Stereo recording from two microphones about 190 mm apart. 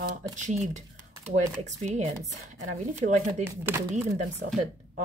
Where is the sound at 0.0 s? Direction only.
45° right (ahead or behind).